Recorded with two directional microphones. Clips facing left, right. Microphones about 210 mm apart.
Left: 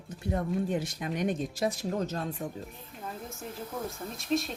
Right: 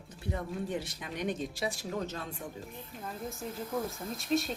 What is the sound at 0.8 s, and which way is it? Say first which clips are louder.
Speech: left 5 dB; 50° left (ahead or behind).